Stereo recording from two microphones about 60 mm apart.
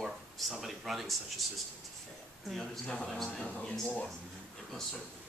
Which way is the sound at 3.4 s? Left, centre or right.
Centre.